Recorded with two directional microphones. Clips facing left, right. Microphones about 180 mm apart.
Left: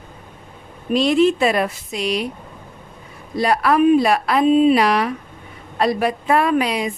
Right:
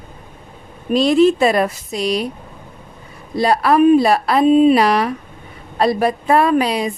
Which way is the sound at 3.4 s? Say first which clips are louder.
Right 3 dB; 30° right (ahead or behind).